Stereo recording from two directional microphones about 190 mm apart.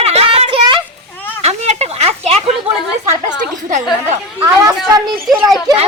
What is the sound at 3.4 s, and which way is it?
Speech, 40° right (ahead or behind).